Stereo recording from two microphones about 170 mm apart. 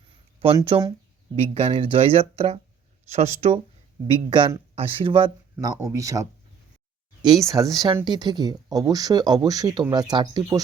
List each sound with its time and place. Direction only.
0.3 s speech: 35° right (ahead or behind)
4.0 s speech: 30° right (ahead or behind)
7.4 s speech: 20° right (ahead or behind)